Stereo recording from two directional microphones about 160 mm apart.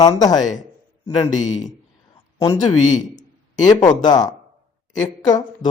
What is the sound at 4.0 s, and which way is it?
Speech, 25° left (ahead or behind).